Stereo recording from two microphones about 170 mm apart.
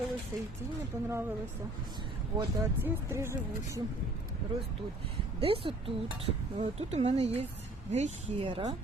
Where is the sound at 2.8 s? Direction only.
15° right (ahead or behind).